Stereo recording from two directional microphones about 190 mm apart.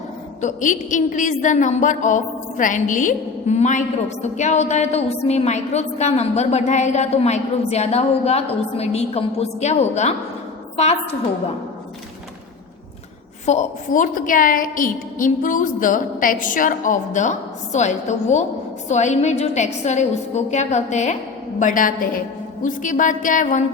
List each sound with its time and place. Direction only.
0.4 s a woman's voice: 40° left (ahead or behind)
13.4 s a woman's voice: 40° left (ahead or behind)